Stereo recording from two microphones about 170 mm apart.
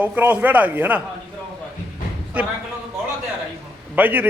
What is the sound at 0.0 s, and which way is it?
Speech, 10° right (ahead or behind).